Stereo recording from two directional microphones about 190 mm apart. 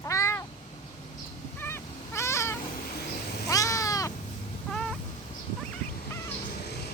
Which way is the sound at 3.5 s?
15° left (ahead or behind).